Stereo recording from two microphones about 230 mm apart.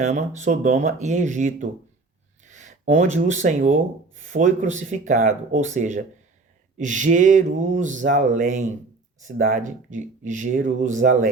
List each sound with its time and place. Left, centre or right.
0.0 s speech: right